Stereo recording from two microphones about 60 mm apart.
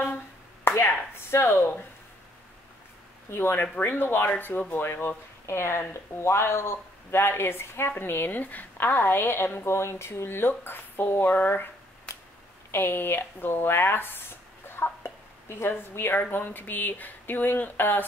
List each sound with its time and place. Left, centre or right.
0.7 s speech: left
3.3 s a woman's voice: left
12.7 s speech: left